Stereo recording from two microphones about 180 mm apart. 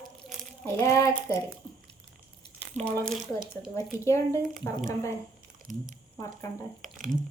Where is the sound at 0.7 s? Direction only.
15° left (ahead or behind).